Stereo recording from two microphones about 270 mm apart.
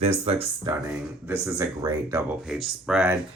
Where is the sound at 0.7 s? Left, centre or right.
Centre.